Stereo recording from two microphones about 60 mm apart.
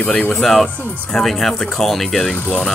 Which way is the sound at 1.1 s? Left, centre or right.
Centre.